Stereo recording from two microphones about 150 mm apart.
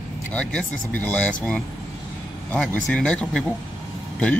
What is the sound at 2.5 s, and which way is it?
Speech, 5° left (ahead or behind).